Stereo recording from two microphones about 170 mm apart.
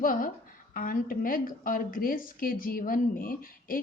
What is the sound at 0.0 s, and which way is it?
Speech, 55° left (ahead or behind).